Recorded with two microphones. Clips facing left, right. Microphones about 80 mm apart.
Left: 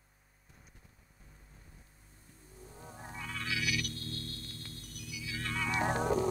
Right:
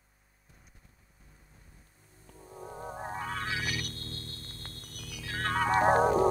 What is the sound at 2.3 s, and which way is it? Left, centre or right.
Music, right.